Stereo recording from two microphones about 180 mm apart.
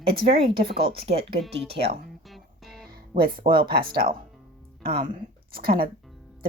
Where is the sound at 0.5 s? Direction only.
60° right (ahead or behind).